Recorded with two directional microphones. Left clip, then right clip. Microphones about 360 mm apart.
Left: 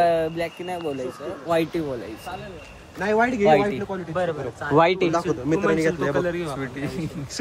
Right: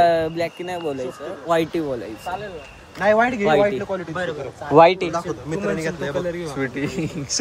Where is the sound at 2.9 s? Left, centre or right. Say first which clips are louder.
Right 4 dB; right.